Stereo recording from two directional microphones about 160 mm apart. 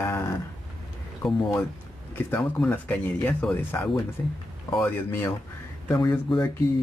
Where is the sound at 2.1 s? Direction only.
10° left (ahead or behind).